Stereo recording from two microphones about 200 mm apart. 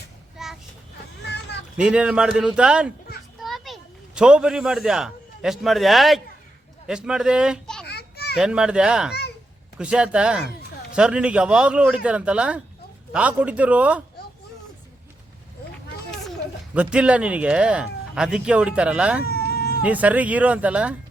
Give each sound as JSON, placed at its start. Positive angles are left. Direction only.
{"t": 0.4, "sound": "child singing", "side_deg": 0}
{"t": 1.8, "sound": "a child's voice", "side_deg": -5}
{"t": 7.9, "sound": "children playing", "side_deg": 55}
{"t": 8.4, "sound": "speech", "side_deg": -5}
{"t": 16.7, "sound": "speech", "side_deg": -5}
{"t": 19.2, "sound": "a sound", "side_deg": 50}
{"t": 19.8, "sound": "speech", "side_deg": -5}